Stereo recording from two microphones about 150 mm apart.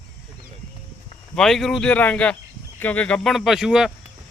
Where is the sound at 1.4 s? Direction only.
Centre (ahead or behind).